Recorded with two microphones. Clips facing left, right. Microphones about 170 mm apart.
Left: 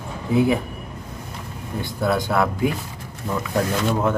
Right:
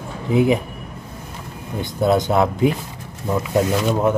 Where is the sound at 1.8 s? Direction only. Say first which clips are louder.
Right 5 dB; 20° right (ahead or behind).